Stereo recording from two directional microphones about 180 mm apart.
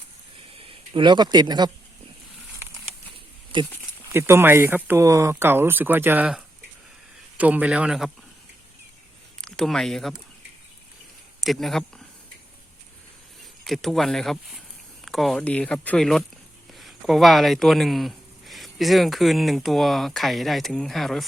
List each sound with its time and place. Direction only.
0.5 s speech: 30° right (ahead or behind)
3.5 s speech: 25° right (ahead or behind)
4.1 s speech: 15° right (ahead or behind)
9.4 s speech: 5° left (ahead or behind)
11.3 s speech: centre (ahead or behind)
13.7 s speech: centre (ahead or behind)